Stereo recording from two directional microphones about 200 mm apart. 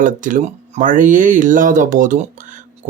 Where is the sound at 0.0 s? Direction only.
40° right (ahead or behind).